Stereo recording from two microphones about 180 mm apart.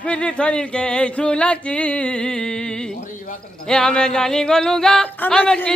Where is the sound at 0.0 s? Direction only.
5° left (ahead or behind).